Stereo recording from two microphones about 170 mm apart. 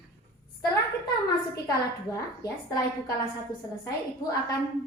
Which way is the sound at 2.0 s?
20° left (ahead or behind).